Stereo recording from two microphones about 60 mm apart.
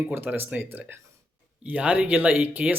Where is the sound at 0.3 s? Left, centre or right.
Right.